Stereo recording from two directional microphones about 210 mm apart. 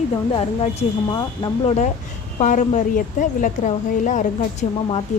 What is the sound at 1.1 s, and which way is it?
Speech, 20° left (ahead or behind).